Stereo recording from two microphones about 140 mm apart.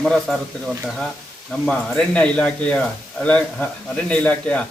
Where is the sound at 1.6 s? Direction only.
5° left (ahead or behind).